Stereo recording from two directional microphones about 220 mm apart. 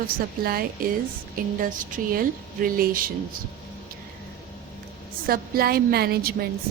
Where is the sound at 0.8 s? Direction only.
40° right (ahead or behind).